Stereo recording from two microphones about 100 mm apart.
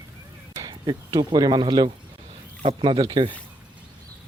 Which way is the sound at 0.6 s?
40° right (ahead or behind).